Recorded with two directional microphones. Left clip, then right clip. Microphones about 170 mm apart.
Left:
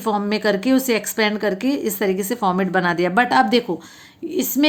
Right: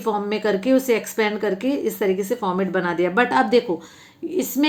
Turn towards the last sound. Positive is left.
turn(degrees=30)  # may be behind; listen again after turning